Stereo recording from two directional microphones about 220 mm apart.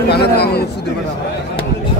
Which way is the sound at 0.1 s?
50° left (ahead or behind).